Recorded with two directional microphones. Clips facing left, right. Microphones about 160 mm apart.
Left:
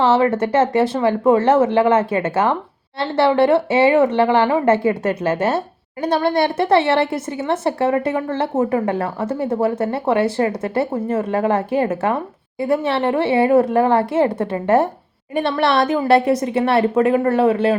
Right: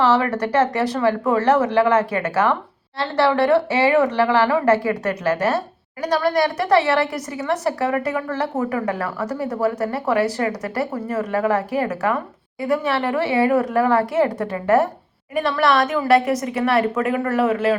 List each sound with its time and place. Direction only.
0.0 s speech: 25° left (ahead or behind)